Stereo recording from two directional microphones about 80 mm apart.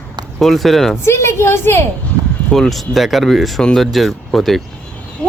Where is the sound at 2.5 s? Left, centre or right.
Centre.